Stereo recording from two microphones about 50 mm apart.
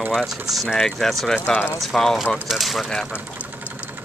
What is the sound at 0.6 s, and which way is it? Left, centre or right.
Speech, centre.